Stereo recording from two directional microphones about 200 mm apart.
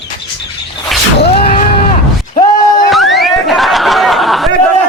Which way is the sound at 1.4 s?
35° left (ahead or behind).